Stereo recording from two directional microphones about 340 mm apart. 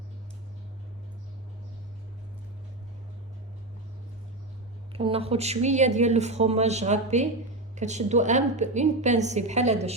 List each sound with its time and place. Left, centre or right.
4.9 s a woman's voice: centre